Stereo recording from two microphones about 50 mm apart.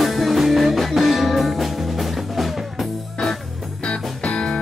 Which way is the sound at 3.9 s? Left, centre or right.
Centre.